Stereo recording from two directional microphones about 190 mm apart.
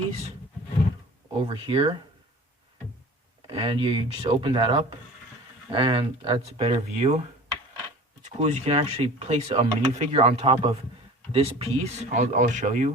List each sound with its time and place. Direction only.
1.4 s speech: 30° right (ahead or behind)
3.4 s speech: 30° right (ahead or behind)
8.2 s speech: 35° right (ahead or behind)